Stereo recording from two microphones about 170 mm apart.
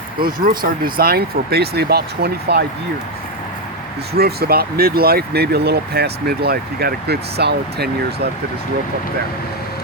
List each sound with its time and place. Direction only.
0.2 s speech: 55° right (ahead or behind)
4.1 s speech: 65° right (ahead or behind)